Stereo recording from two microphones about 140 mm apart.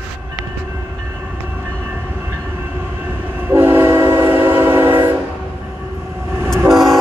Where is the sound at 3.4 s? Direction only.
15° right (ahead or behind).